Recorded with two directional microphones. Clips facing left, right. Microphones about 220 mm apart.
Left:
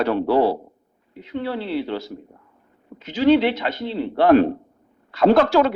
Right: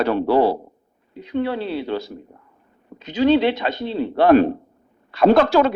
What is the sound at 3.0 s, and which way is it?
A man's voice, 20° right (ahead or behind).